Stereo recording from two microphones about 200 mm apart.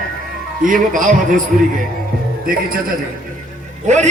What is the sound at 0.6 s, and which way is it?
Speech, 40° right (ahead or behind).